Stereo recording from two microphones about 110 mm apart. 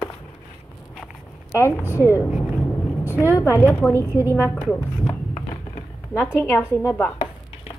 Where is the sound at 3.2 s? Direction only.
25° left (ahead or behind).